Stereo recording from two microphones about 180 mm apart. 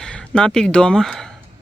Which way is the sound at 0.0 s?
5° left (ahead or behind).